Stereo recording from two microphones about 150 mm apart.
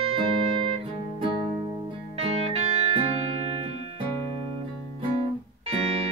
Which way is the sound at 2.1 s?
40° right (ahead or behind).